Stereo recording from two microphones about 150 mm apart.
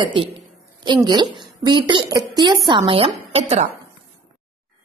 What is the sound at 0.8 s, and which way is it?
A woman's voice, 30° right (ahead or behind).